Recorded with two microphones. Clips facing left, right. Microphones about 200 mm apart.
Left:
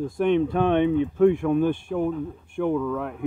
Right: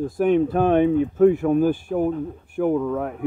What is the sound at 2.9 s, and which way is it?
Speech, 45° right (ahead or behind).